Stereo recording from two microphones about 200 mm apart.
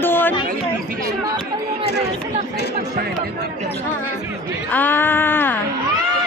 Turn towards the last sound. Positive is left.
turn(degrees=10)  # may be behind; listen again after turning